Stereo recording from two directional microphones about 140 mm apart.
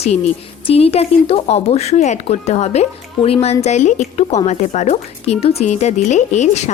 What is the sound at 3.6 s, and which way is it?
Speech, 60° left (ahead or behind).